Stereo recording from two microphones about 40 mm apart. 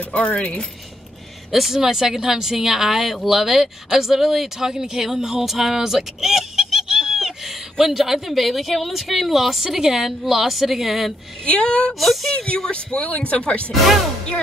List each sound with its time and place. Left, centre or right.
0.1 s speech: left
1.5 s a woman's voice: centre
11.4 s speech: left
12.0 s a woman's voice: centre
12.4 s speech: left